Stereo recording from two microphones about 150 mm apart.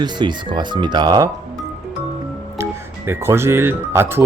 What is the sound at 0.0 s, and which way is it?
Speech, 30° right (ahead or behind).